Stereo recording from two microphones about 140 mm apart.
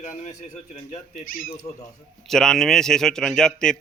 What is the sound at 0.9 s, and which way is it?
Speech, 80° left.